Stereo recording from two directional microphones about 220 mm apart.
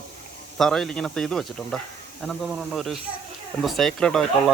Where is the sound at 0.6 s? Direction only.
Centre (ahead or behind).